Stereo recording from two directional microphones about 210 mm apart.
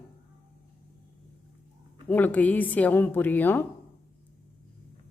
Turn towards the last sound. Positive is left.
turn(degrees=10)  # may be behind; listen again after turning